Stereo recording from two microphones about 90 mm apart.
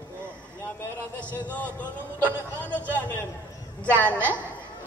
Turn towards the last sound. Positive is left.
turn(degrees=15)  # may be behind; listen again after turning